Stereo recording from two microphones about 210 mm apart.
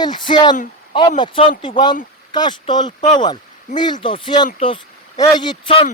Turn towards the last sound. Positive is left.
turn(degrees=25)  # may be behind; listen again after turning